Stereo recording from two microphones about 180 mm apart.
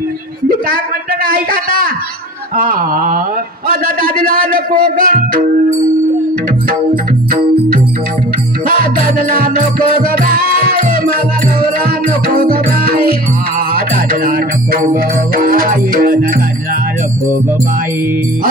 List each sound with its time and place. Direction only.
1.2 s speech: 55° right (ahead or behind)
8.6 s music: 55° right (ahead or behind)
12.3 s music: 55° right (ahead or behind)